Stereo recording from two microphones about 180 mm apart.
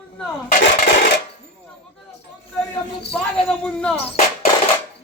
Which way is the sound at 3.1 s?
5° left (ahead or behind).